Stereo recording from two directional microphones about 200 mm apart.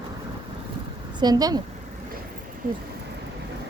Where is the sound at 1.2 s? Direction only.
20° right (ahead or behind).